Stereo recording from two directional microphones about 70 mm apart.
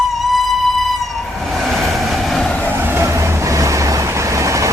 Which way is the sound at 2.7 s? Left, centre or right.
Right.